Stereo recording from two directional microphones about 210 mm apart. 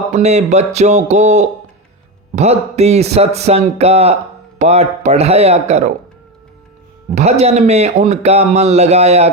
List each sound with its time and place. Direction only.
0.1 s a man's voice: 30° right (ahead or behind)
7.2 s a man's voice: 30° right (ahead or behind)